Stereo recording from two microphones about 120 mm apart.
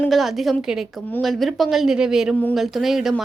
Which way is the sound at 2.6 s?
Centre (ahead or behind).